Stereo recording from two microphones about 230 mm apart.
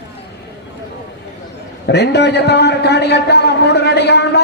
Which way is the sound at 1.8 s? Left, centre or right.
Left.